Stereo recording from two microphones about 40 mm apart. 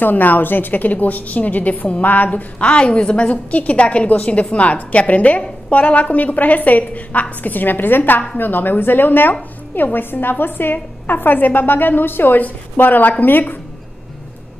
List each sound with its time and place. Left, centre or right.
0.0 s a woman's voice: left
2.6 s a woman's voice: left